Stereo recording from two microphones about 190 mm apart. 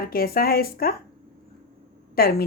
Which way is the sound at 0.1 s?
50° left (ahead or behind).